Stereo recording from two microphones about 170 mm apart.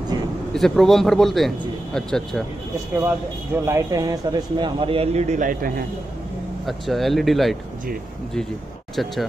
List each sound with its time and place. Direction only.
0.5 s a man's voice: centre (ahead or behind)
3.0 s a man's voice: 15° right (ahead or behind); by 5.9 s 55° right (ahead or behind)
6.6 s a man's voice: centre (ahead or behind)